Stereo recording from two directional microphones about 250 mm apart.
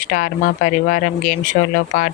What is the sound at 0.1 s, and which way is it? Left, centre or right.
Speech, left.